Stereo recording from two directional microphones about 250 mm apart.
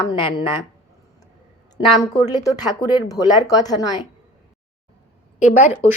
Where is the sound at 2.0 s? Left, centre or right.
Centre.